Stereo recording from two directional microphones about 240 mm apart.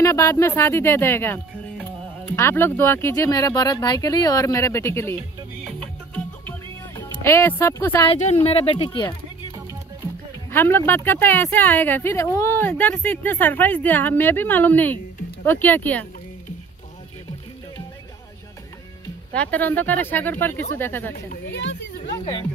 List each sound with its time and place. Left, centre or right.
0.0 s speech: centre
7.0 s speech: centre
8.1 s speech: left
10.5 s speech: centre
19.3 s speech: centre
21.3 s speech: left
22.2 s speech: centre